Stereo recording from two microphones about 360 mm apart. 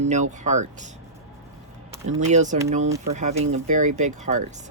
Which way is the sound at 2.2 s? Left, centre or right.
Centre.